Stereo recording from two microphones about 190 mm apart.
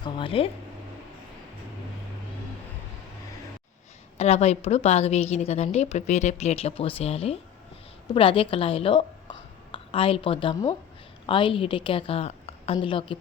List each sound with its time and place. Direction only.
0.0 s speech: 25° left (ahead or behind)
4.2 s a woman's voice: 35° left (ahead or behind)